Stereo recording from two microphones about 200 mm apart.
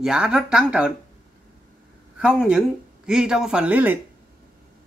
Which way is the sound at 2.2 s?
5° right (ahead or behind).